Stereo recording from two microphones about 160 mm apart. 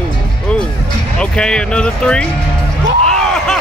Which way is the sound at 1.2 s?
5° left (ahead or behind).